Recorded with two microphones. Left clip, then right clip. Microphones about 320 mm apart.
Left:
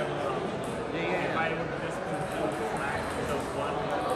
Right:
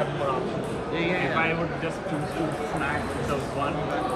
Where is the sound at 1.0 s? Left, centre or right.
Right.